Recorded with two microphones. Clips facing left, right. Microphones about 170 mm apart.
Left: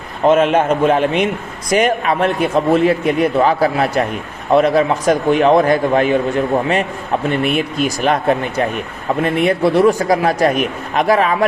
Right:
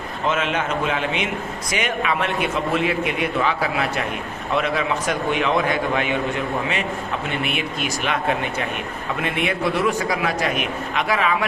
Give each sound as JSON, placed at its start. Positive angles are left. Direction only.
{"t": 0.3, "sound": "a man's voice", "side_deg": 50}
{"t": 7.3, "sound": "a man's voice", "side_deg": 40}